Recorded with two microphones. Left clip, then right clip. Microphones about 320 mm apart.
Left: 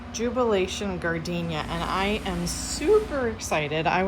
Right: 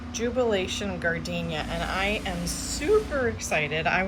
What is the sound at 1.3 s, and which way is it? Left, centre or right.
Speech, left.